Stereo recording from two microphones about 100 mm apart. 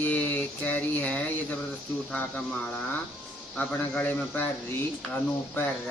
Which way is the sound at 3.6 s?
15° left (ahead or behind).